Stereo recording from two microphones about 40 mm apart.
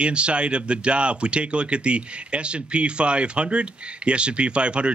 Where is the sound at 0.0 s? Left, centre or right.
Right.